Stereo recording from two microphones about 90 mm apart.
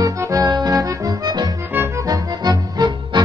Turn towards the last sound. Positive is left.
turn(degrees=-50)  # may be behind; listen again after turning